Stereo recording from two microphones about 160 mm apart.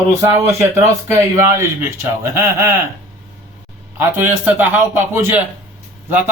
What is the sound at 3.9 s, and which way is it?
A man's voice, 10° right (ahead or behind).